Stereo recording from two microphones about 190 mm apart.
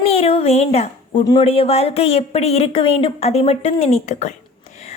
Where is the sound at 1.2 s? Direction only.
20° left (ahead or behind).